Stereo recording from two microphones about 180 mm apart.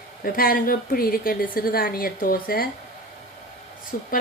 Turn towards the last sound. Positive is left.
turn(degrees=55)  # may be behind; listen again after turning